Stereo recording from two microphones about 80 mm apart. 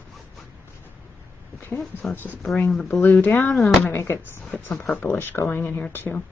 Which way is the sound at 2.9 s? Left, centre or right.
Left.